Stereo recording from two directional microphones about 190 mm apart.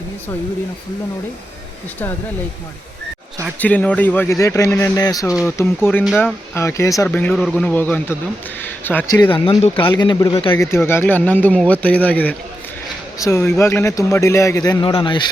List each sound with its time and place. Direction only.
3.6 s a man's voice: 10° left (ahead or behind)
9.3 s a man's voice: 25° left (ahead or behind)